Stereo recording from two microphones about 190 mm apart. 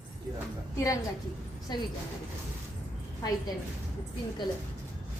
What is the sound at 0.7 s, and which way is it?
A woman's voice, 15° left (ahead or behind).